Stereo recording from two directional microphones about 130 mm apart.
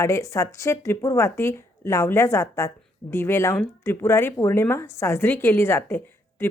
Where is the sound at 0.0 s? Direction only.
25° left (ahead or behind).